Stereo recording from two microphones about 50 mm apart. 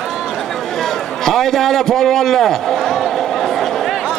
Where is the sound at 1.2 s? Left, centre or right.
Centre.